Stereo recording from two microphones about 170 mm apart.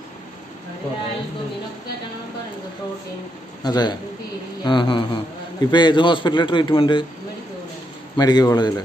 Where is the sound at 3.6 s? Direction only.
25° left (ahead or behind).